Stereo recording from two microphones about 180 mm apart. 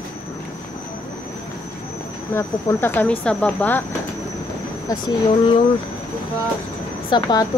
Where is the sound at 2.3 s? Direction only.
10° left (ahead or behind).